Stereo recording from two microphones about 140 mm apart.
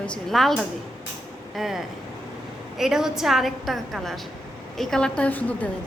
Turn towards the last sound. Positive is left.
turn(degrees=10)  # may be behind; listen again after turning